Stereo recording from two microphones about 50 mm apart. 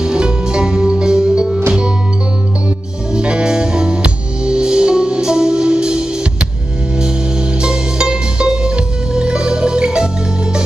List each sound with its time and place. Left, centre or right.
0.0 s music: centre
3.2 s music: centre
7.6 s music: centre